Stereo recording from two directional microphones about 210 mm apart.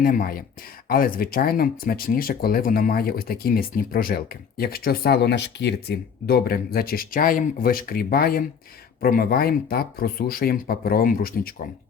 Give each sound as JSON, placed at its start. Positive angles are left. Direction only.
{"t": 0.0, "sound": "speech", "side_deg": 45}